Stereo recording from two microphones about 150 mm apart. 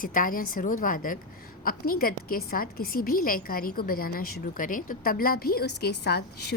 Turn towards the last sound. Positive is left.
turn(degrees=90)